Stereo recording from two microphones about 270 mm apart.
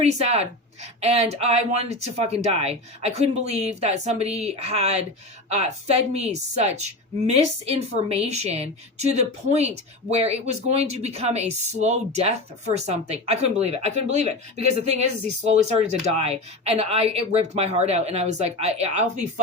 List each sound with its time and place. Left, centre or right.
0.0 s a woman's voice: right
16.1 s a woman's voice: right